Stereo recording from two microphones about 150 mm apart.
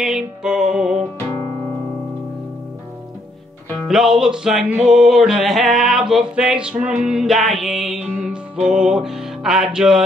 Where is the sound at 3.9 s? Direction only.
Centre (ahead or behind).